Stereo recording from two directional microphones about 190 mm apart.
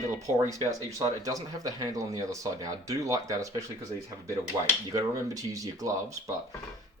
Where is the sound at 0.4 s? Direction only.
15° right (ahead or behind).